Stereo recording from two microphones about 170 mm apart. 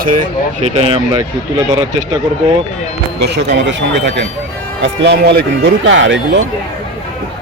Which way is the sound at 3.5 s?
90° right.